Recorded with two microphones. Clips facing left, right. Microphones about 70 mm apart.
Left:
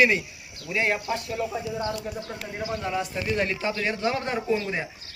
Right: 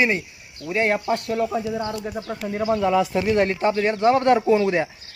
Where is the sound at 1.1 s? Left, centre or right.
Right.